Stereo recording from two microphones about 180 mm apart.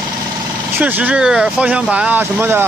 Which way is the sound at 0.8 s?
10° right (ahead or behind).